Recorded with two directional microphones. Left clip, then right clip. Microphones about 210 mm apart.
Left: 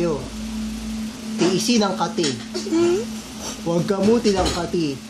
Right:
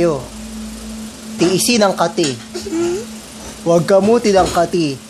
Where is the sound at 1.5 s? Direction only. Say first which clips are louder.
Right 8 dB; 50° right (ahead or behind).